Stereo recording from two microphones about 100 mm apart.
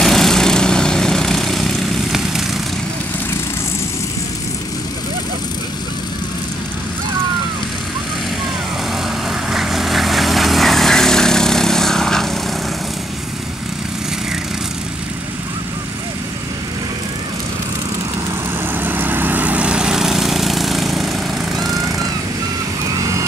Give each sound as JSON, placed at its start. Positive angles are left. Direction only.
{"t": 0.0, "sound": "lawn mower", "side_deg": 5}
{"t": 9.5, "sound": "vehicle", "side_deg": -5}
{"t": 18.8, "sound": "lawn mower", "side_deg": -20}
{"t": 22.9, "sound": "vehicle", "side_deg": -35}